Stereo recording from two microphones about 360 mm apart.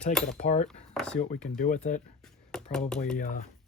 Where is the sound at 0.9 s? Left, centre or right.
Centre.